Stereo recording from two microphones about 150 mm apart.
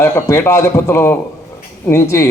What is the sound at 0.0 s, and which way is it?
A man's voice, 15° left (ahead or behind).